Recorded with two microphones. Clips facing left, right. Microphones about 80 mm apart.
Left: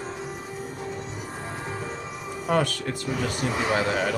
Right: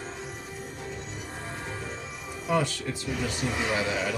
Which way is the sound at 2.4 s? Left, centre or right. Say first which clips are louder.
Left 3 dB; left.